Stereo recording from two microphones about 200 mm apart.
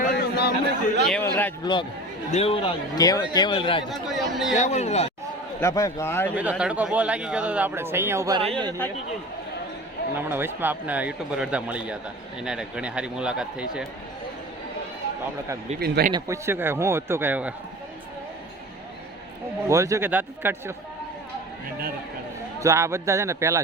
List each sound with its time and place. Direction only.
0.0 s chatter: 55° left (ahead or behind)
1.2 s a man's voice: 10° left (ahead or behind)
1.6 s a man's voice: 25° left (ahead or behind)
3.8 s speech: centre (ahead or behind)
4.5 s speech: 35° left (ahead or behind)
5.5 s a man's voice: 15° left (ahead or behind)
6.3 s speech: 5° right (ahead or behind)
10.2 s speech: 10° right (ahead or behind)
15.8 s speech: 50° right (ahead or behind)
16.1 s speech: 15° right (ahead or behind)
19.6 s speech: 15° right (ahead or behind)
22.6 s speech: 15° right (ahead or behind)